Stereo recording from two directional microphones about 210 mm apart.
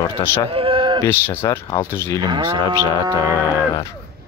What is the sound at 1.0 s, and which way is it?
Speech, 10° left (ahead or behind).